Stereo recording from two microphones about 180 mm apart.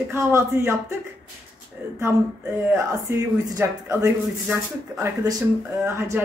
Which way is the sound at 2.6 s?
15° right (ahead or behind).